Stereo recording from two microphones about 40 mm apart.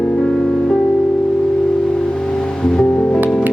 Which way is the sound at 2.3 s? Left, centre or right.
Centre.